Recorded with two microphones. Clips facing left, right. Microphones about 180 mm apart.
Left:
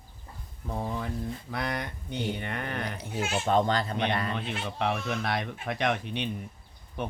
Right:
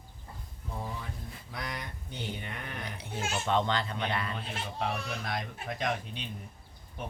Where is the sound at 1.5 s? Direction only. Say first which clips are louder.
Left 5 dB; 60° left (ahead or behind); by 3.0 s 80° left.